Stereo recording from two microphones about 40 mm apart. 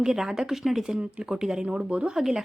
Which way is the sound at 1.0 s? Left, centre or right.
Right.